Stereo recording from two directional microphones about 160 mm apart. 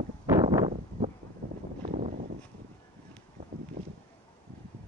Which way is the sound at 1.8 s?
55° right (ahead or behind).